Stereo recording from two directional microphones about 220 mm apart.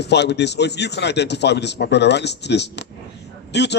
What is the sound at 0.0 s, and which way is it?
A man's voice, 50° left (ahead or behind).